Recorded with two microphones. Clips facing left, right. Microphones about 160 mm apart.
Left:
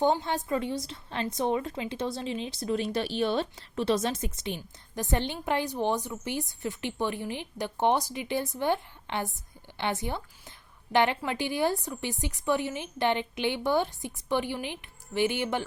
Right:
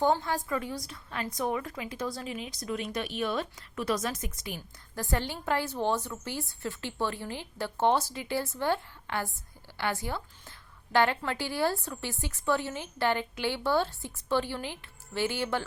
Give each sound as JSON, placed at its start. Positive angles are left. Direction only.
{"t": 0.0, "sound": "a woman's voice", "side_deg": 20}